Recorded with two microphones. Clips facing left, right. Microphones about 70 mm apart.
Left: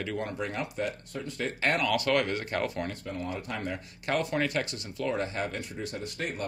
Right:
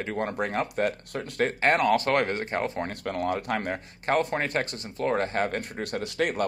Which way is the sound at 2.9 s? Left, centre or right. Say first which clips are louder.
Right 7 dB; right.